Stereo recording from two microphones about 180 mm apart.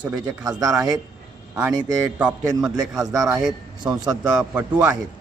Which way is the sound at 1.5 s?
15° right (ahead or behind).